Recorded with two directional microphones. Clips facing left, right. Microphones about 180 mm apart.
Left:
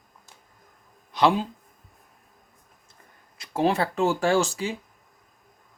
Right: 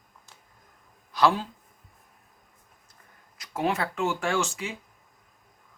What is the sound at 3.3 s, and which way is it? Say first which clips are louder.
Speech: left 5 dB; 30° left (ahead or behind).